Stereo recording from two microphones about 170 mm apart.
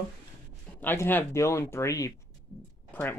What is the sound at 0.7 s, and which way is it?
Speech, 10° left (ahead or behind).